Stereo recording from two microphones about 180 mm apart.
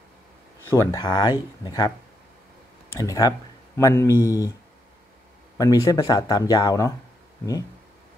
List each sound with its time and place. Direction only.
0.7 s speech: 15° left (ahead or behind)
2.9 s speech: 20° left (ahead or behind)
5.6 s speech: 20° left (ahead or behind)